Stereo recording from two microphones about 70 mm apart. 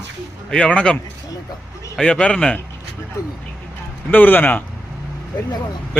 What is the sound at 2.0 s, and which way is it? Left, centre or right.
Speech, centre.